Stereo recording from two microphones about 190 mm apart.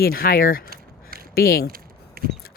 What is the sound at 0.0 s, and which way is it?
Speech, 50° left (ahead or behind).